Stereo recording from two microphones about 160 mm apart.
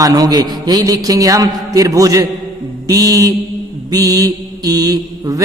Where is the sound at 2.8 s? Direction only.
25° right (ahead or behind).